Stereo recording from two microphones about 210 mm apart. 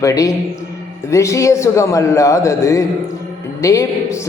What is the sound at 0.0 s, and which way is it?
A man's voice, 15° left (ahead or behind).